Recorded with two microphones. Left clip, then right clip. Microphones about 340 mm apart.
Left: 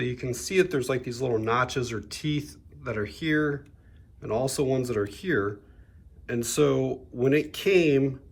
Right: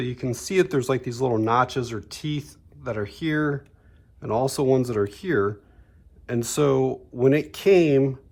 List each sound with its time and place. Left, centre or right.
0.0 s speech: centre